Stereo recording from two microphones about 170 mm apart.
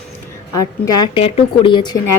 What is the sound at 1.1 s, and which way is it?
Speech, 35° left (ahead or behind).